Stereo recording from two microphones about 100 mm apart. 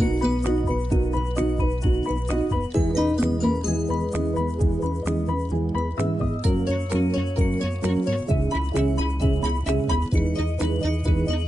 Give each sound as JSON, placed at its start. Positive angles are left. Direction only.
{"t": 2.9, "sound": "music", "side_deg": 0}